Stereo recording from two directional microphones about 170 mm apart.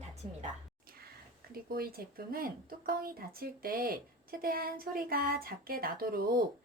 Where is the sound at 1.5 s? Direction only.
60° right (ahead or behind).